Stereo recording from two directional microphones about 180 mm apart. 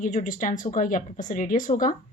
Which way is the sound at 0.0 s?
45° left (ahead or behind).